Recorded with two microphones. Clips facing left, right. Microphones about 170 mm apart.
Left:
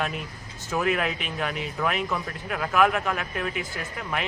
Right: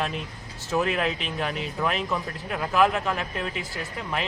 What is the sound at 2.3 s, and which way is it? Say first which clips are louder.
Speech: even; 20° right (ahead or behind).